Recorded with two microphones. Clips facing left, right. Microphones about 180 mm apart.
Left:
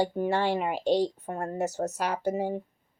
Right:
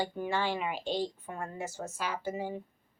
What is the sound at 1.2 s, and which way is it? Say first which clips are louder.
Speech: left 8 dB; 40° left (ahead or behind).